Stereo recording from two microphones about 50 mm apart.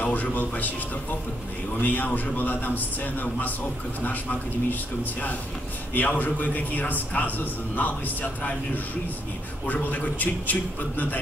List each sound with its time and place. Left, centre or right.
0.0 s a man's voice: left
1.8 s a man's voice: left
5.9 s a man's voice: left
9.7 s a man's voice: left